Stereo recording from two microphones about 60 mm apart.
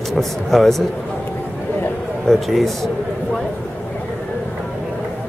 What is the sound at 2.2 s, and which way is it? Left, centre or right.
Speech, centre.